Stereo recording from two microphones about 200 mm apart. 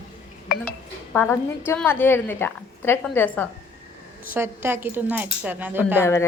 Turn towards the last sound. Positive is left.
turn(degrees=15)  # may be behind; listen again after turning